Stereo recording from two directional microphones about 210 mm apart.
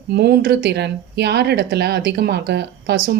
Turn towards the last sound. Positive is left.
turn(degrees=-50)  # may be behind; listen again after turning